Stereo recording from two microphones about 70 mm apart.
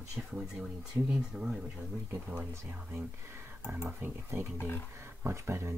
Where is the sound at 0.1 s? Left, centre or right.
Centre.